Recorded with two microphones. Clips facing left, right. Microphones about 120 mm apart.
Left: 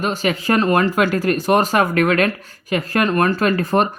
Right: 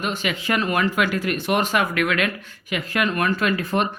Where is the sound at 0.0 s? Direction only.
40° left (ahead or behind).